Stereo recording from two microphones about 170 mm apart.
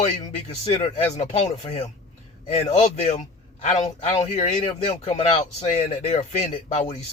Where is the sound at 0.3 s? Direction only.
35° left (ahead or behind).